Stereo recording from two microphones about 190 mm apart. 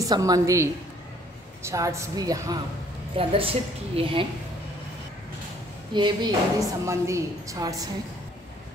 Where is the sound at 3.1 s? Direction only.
30° right (ahead or behind).